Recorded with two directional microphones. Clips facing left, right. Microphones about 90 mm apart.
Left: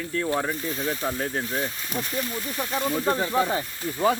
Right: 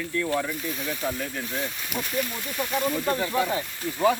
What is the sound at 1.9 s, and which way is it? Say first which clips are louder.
Speech: right 1 dB; 35° left (ahead or behind).